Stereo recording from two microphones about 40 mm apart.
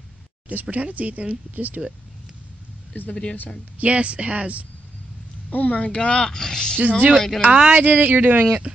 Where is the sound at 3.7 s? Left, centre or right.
Right.